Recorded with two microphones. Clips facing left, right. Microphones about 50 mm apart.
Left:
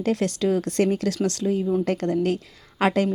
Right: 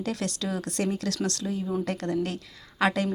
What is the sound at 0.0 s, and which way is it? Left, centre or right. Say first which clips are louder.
A woman's voice: left 8 dB; left.